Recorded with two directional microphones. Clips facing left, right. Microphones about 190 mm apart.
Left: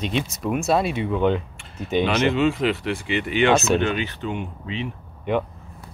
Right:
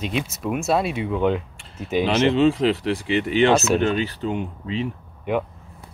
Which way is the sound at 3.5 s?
5° right (ahead or behind).